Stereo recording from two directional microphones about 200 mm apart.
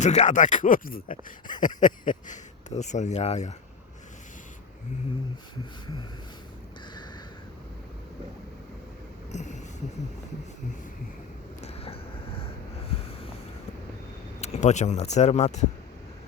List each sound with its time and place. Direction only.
0.0 s speech: 35° left (ahead or behind)
9.3 s a sound: 35° left (ahead or behind)
11.6 s vehicle: 30° left (ahead or behind)
14.4 s speech: 35° left (ahead or behind)